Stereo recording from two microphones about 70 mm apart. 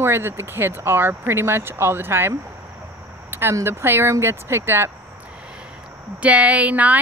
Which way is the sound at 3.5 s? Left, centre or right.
Right.